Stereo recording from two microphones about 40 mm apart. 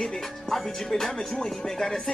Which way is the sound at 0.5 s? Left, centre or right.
Centre.